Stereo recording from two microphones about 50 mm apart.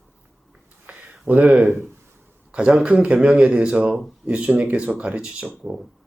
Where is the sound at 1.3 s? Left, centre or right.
Centre.